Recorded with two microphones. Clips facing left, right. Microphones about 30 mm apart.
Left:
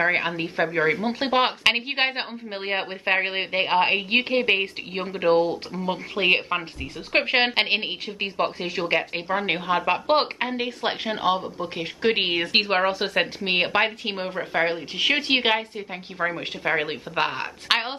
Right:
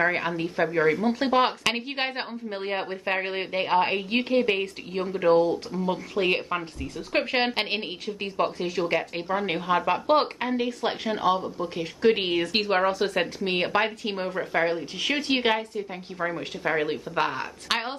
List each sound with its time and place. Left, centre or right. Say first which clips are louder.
0.0 s a woman's voice: left 2 dB; left
14.3 s speech: right 1 dB; centre
14.6 s a woman's voice: left 4 dB; left